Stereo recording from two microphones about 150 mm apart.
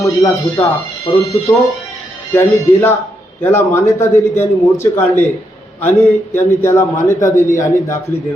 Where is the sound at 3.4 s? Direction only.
15° left (ahead or behind).